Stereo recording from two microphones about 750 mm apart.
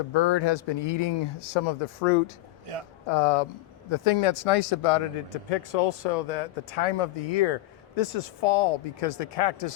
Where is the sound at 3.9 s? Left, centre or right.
Left.